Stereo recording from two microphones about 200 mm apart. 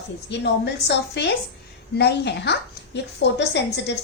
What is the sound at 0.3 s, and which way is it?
A woman's voice, 60° left (ahead or behind).